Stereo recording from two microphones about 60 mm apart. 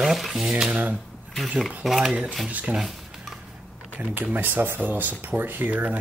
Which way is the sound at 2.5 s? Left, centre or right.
Centre.